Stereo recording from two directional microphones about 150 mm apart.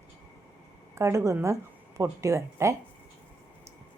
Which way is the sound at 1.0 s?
20° right (ahead or behind).